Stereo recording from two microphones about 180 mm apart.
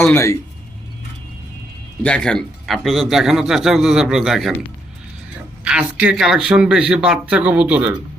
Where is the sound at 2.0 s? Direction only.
5° left (ahead or behind).